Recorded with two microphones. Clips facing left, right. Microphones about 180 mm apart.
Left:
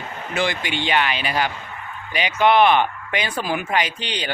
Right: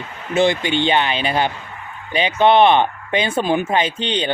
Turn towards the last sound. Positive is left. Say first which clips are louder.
# right 6 dB
turn(degrees=-25)  # may be behind; listen again after turning